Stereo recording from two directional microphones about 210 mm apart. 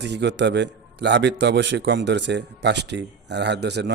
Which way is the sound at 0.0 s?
55° right (ahead or behind).